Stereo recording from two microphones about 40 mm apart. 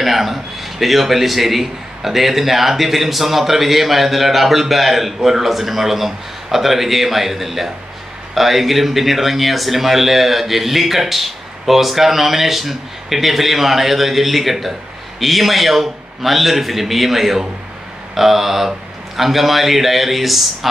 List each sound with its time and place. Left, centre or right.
0.0 s speech: centre